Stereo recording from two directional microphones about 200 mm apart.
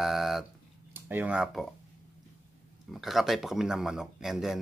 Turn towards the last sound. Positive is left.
turn(degrees=0)  # may be behind; listen again after turning